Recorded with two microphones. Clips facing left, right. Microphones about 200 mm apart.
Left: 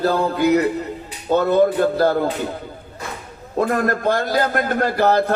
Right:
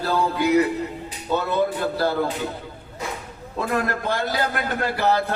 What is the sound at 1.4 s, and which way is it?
Speech, 45° left (ahead or behind).